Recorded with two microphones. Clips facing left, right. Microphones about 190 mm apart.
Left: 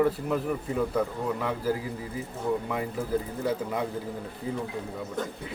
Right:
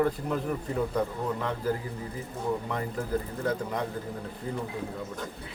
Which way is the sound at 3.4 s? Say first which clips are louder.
Left 1 dB; 5° left (ahead or behind).